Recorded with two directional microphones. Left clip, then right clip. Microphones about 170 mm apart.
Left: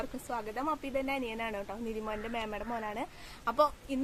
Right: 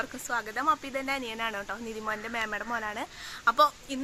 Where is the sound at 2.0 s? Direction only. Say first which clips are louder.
Right 7 dB; 40° right (ahead or behind).